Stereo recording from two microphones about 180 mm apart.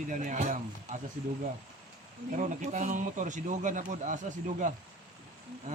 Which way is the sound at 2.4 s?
40° right (ahead or behind).